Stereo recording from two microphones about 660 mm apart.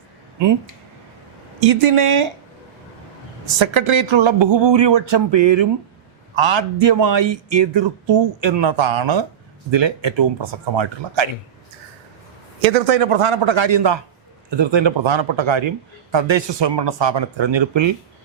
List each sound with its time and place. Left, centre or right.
1.6 s speech: right
3.6 s speech: right
12.7 s speech: right